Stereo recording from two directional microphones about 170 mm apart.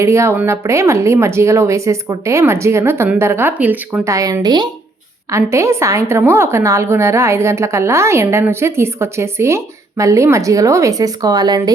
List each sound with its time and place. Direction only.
0.0 s a woman's voice: 15° right (ahead or behind)